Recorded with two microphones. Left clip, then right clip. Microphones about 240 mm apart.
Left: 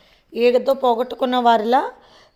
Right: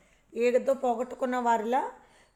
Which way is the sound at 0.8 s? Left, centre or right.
Left.